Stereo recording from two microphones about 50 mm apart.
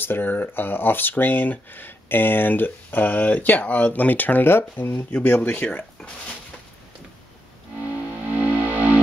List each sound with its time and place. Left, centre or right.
0.0 s speech: left
5.1 s speech: left
5.7 s speech: left
8.2 s music: right